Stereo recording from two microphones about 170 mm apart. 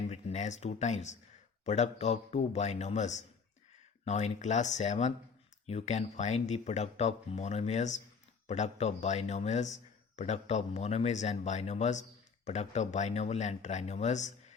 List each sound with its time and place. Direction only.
0.1 s a man's voice: 40° left (ahead or behind)